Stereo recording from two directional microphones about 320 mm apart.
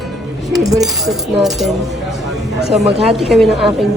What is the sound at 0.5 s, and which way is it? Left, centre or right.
Speech, centre.